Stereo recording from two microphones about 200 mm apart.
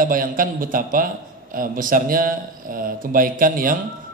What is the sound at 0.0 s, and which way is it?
A man's voice, 45° right (ahead or behind).